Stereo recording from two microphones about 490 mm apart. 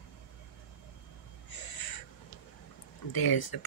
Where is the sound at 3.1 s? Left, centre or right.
Left.